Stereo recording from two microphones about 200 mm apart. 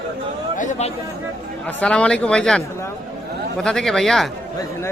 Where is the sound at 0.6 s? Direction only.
35° left (ahead or behind).